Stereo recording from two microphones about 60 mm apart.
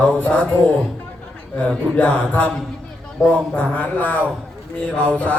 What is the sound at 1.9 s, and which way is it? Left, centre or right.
Speech, left.